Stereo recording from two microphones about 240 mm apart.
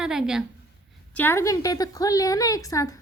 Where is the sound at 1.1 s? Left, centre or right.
Centre.